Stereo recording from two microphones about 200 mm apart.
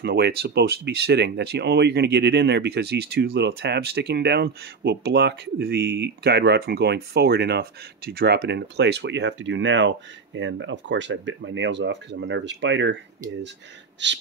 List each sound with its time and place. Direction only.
0.0 s speech: 50° right (ahead or behind)
14.0 s speech: 60° right (ahead or behind)